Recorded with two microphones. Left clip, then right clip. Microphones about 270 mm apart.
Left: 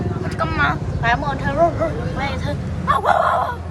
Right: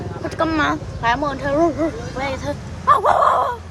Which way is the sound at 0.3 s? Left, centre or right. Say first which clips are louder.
Right 1 dB; right.